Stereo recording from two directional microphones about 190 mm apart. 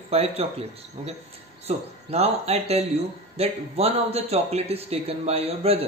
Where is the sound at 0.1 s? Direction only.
30° right (ahead or behind).